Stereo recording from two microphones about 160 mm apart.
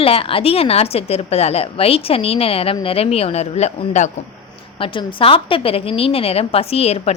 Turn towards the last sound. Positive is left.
turn(degrees=40)  # may be behind; listen again after turning